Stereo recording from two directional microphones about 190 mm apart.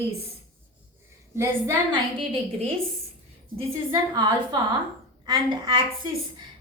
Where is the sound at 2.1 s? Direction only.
30° right (ahead or behind).